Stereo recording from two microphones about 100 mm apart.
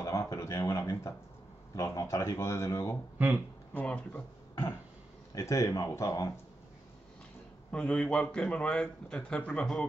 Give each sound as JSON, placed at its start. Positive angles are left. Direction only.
{"t": 0.0, "sound": "a sound", "side_deg": 35}
{"t": 1.8, "sound": "speech", "side_deg": 35}
{"t": 3.7, "sound": "a man's voice", "side_deg": 15}
{"t": 5.3, "sound": "speech", "side_deg": 30}
{"t": 7.7, "sound": "a man's voice", "side_deg": 10}